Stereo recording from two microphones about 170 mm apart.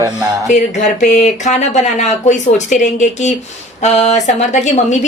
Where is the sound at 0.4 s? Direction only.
45° left (ahead or behind).